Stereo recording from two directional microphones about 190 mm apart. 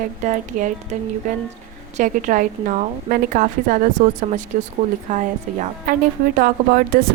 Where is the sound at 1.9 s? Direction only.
40° right (ahead or behind).